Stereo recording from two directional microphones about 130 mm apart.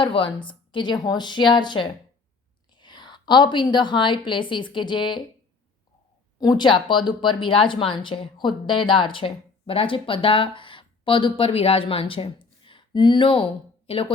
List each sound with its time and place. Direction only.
0.0 s a woman's voice: 40° left (ahead or behind)
6.4 s speech: 35° left (ahead or behind)